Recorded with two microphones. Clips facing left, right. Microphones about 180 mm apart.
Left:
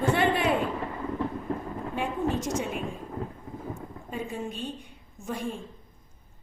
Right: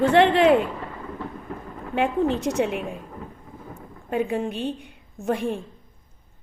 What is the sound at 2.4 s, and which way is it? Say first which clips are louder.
Speech: right 6 dB; 60° right (ahead or behind).